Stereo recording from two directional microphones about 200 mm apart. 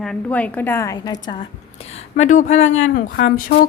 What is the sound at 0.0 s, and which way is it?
A woman's voice, 5° left (ahead or behind).